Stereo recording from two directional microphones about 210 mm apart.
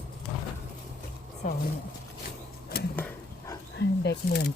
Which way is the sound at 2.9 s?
10° left (ahead or behind).